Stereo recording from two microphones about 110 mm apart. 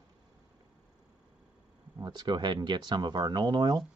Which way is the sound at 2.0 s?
40° right (ahead or behind).